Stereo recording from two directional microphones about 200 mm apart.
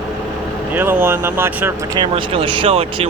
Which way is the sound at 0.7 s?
10° right (ahead or behind).